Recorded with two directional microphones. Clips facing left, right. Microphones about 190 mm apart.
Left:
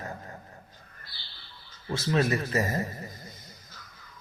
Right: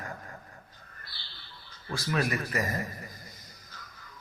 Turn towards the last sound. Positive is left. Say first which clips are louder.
# left 3 dB
turn(degrees=25)  # may be behind; listen again after turning